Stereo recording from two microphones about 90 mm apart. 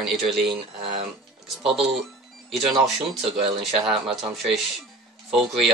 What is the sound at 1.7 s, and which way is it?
Speech, 5° right (ahead or behind).